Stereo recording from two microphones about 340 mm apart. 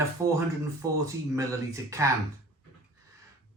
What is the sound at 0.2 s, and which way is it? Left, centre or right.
Speech, centre.